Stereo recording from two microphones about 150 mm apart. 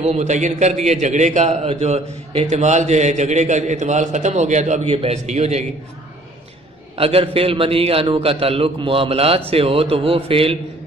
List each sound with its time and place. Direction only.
0.0 s a man's voice: 50° right (ahead or behind)
7.0 s a man's voice: 40° right (ahead or behind)